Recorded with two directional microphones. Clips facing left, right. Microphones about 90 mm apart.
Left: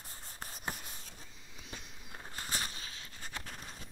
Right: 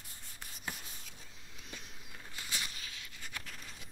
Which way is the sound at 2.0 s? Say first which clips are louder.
Left 4 dB; 40° left (ahead or behind).